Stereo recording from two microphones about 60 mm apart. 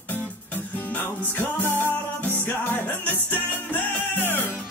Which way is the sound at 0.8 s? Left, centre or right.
Left.